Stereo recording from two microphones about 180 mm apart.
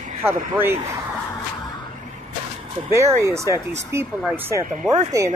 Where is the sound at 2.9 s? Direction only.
15° right (ahead or behind).